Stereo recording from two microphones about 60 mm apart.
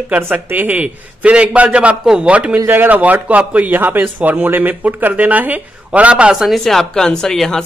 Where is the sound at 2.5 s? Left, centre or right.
Right.